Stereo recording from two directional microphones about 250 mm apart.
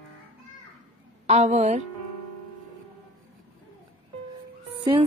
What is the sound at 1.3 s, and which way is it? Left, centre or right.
Speech, right.